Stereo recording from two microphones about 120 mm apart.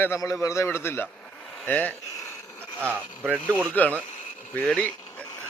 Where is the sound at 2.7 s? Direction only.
15° right (ahead or behind).